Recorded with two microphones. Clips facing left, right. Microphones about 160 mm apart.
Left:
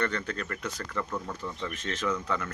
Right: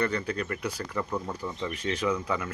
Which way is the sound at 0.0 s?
10° right (ahead or behind).